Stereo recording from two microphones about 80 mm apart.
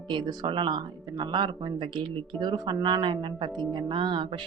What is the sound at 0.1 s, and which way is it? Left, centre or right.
Speech, right.